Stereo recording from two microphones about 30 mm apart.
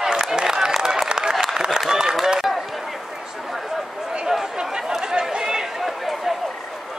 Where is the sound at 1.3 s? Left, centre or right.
Centre.